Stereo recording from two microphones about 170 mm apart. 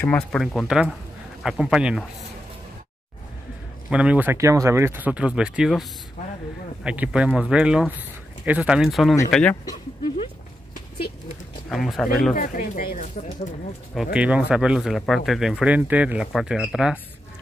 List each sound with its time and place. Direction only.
0.0 s speech: 5° left (ahead or behind)
3.9 s speech: 5° right (ahead or behind)
6.2 s a sound: 45° left (ahead or behind)
6.8 s speech: 5° right (ahead or behind)
11.7 s speech: centre (ahead or behind)
12.4 s speech: 55° left (ahead or behind)
13.9 s speech: 5° right (ahead or behind)